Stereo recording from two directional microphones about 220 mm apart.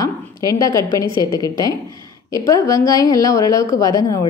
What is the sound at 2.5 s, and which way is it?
A woman's voice, 15° left (ahead or behind).